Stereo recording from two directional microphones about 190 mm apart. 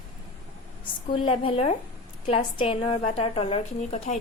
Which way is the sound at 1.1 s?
30° left (ahead or behind).